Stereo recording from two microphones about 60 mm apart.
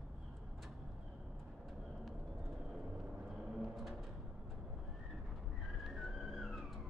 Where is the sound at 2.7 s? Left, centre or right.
Centre.